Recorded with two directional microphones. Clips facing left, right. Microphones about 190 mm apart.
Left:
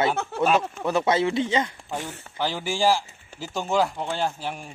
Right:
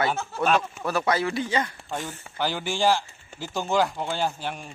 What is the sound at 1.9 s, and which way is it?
Speech, 5° left (ahead or behind).